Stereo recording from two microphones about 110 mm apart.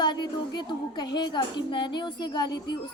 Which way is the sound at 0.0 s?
40° left (ahead or behind).